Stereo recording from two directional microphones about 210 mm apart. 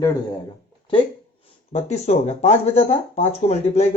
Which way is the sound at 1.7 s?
30° left (ahead or behind).